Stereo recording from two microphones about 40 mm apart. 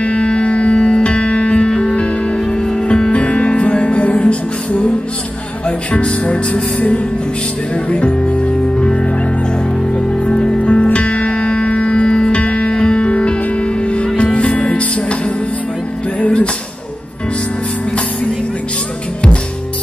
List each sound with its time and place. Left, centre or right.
0.0 s music: left
12.7 s music: centre